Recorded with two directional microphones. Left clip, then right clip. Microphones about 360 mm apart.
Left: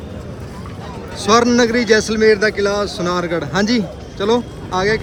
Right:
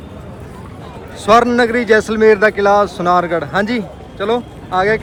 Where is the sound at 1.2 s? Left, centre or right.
Centre.